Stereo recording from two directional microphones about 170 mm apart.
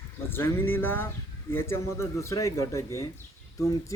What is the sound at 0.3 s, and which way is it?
Speech, 15° left (ahead or behind).